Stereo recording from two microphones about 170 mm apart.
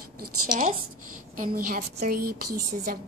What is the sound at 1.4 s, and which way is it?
Speech, 55° right (ahead or behind).